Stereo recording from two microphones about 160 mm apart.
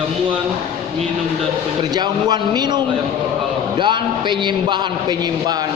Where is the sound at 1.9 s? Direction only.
25° right (ahead or behind).